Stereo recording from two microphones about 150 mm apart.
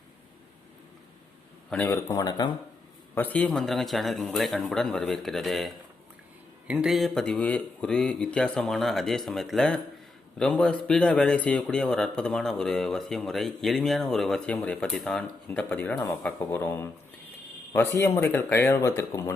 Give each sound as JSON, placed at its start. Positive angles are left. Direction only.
{"t": 1.7, "sound": "speech", "side_deg": 15}
{"t": 3.2, "sound": "a man's voice", "side_deg": 10}